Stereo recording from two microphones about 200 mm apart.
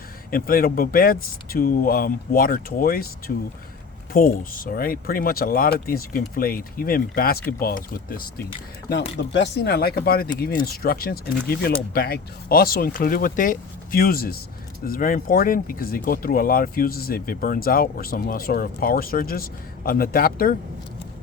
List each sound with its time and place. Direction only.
0.3 s speech: 45° left (ahead or behind)
9.1 s speech: 60° left (ahead or behind)